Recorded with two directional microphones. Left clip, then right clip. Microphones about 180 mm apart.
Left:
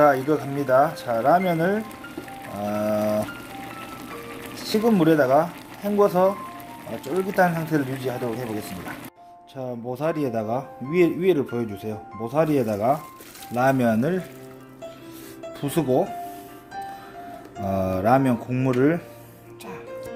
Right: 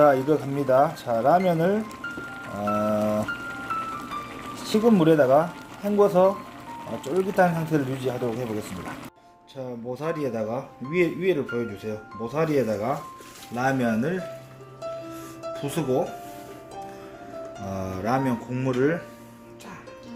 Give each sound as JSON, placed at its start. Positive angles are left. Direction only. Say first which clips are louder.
{"t": 0.0, "sound": "speech", "louder": "even", "side_deg": 0}
{"t": 4.5, "sound": "speech", "louder": "even", "side_deg": 0}
{"t": 9.9, "sound": "speech", "louder": "left 3 dB", "side_deg": 50}
{"t": 13.6, "sound": "speech", "louder": "left 4 dB", "side_deg": 65}
{"t": 15.5, "sound": "speech", "louder": "left 4 dB", "side_deg": 65}
{"t": 17.7, "sound": "speech", "louder": "left 7 dB", "side_deg": 65}